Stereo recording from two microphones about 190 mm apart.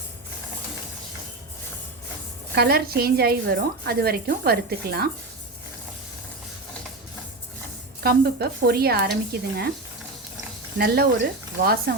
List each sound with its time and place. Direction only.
2.6 s a woman's voice: 55° right (ahead or behind)
8.0 s a woman's voice: 55° right (ahead or behind)
10.8 s a woman's voice: 55° right (ahead or behind)